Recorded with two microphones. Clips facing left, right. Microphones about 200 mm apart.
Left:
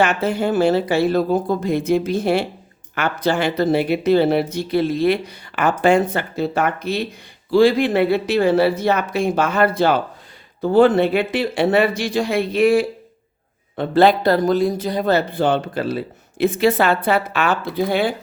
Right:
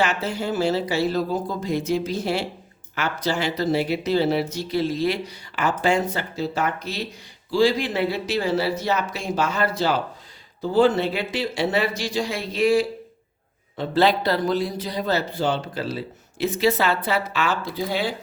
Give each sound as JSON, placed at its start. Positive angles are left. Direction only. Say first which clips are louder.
{"t": 0.0, "sound": "speech", "louder": "left 6 dB", "side_deg": 55}